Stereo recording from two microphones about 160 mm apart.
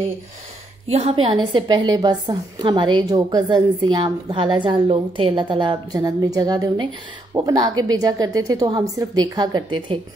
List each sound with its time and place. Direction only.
0.8 s a woman's voice: 40° right (ahead or behind)